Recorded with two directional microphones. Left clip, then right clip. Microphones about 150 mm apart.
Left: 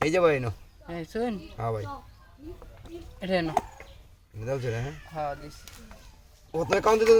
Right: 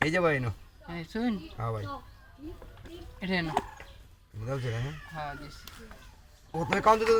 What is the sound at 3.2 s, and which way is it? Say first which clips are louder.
Speech: left 4 dB; 45° left (ahead or behind).